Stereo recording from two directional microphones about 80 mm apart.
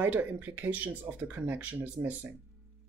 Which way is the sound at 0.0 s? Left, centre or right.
Right.